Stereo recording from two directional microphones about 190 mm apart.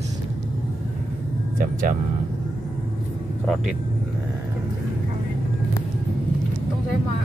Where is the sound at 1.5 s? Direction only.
45° right (ahead or behind).